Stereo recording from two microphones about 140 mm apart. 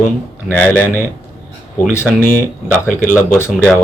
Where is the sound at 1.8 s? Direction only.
10° left (ahead or behind).